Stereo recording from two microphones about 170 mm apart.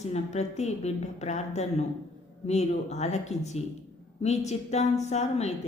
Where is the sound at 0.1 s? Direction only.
40° left (ahead or behind).